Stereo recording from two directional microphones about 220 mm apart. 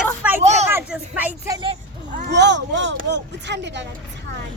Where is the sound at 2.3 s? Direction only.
50° right (ahead or behind).